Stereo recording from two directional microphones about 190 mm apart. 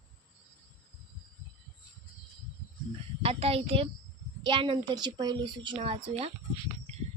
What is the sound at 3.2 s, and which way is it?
A woman's voice, 30° right (ahead or behind).